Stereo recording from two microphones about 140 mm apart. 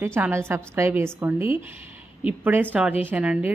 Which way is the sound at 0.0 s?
15° right (ahead or behind).